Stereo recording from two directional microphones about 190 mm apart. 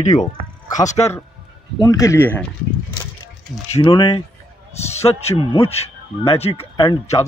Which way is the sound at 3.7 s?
30° left (ahead or behind).